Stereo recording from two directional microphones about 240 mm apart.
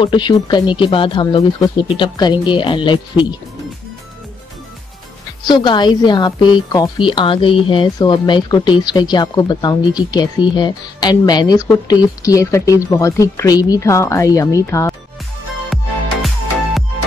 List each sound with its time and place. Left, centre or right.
0.0 s speech: centre
5.5 s a woman's voice: centre
15.7 s music: centre